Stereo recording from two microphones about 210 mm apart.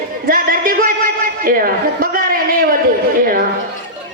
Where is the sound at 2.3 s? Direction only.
45° right (ahead or behind).